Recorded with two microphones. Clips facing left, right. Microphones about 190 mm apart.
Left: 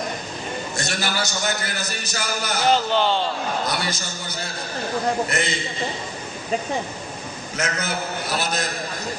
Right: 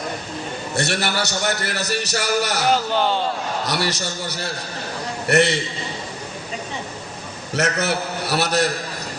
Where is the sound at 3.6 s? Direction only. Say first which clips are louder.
Right 3 dB; 75° right (ahead or behind).